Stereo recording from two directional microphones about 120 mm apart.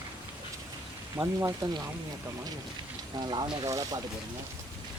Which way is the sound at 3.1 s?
35° right (ahead or behind).